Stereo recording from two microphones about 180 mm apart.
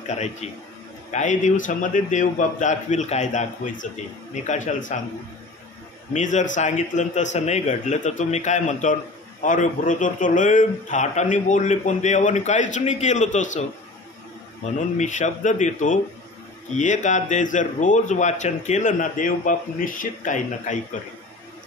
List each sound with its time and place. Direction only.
0.1 s a man's voice: 40° left (ahead or behind)
6.1 s a man's voice: 45° left (ahead or behind)
15.0 s a man's voice: 40° left (ahead or behind)